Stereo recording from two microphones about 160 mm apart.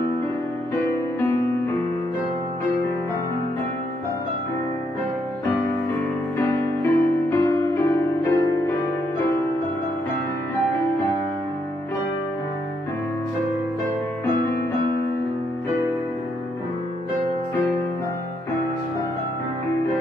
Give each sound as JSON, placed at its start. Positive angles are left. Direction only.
{"t": 6.3, "sound": "music", "side_deg": 15}